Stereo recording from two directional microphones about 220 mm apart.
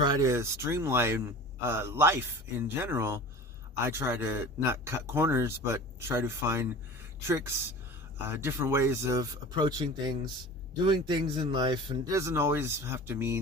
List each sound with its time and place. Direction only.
0.0 s a man's voice: 15° right (ahead or behind)